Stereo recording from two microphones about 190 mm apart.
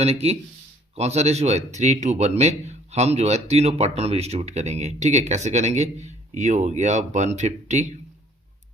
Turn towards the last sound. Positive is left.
turn(degrees=-35)  # may be behind; listen again after turning